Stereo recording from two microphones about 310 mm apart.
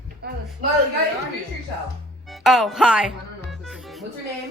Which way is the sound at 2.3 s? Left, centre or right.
Centre.